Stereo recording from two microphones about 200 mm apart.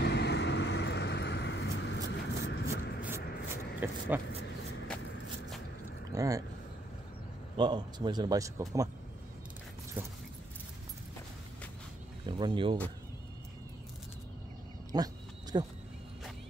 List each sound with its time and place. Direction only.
0.0 s vehicle: 55° left (ahead or behind)
2.7 s a sound: 10° right (ahead or behind)
3.8 s keys jangling: 10° right (ahead or behind)
6.1 s speech: 15° right (ahead or behind)
7.5 s a man's voice: 25° right (ahead or behind)
10.0 s keys jangling: 10° right (ahead or behind)
12.3 s a man's voice: 20° right (ahead or behind)
14.9 s a man's voice: 20° right (ahead or behind)